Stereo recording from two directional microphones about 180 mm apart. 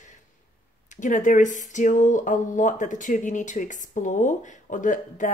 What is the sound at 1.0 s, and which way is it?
Speech, 45° left (ahead or behind).